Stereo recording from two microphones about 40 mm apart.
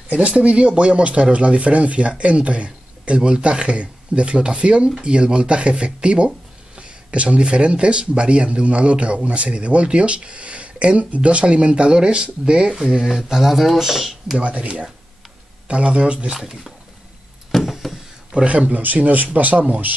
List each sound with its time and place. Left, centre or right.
0.1 s speech: right
13.0 s speech: centre
14.4 s speech: right
16.3 s speech: centre
17.5 s a sound: centre
18.3 s speech: right
18.8 s speech: right